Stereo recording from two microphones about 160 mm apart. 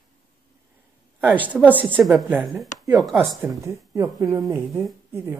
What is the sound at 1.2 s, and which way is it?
Speech, 10° right (ahead or behind).